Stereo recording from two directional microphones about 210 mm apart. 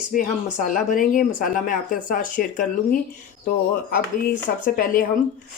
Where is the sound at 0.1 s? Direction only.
40° left (ahead or behind).